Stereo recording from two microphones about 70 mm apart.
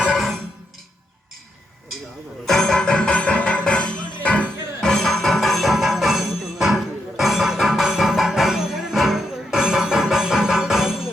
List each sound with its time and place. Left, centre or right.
0.0 s music: centre
2.5 s music: centre
4.9 s music: centre